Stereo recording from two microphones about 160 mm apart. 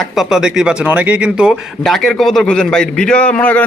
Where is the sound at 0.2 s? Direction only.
5° right (ahead or behind).